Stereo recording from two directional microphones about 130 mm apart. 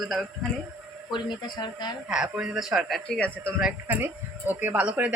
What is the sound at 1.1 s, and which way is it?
Speech, 35° left (ahead or behind).